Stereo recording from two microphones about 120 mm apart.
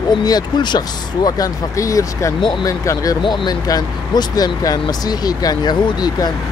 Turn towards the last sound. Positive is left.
turn(degrees=35)  # may be behind; listen again after turning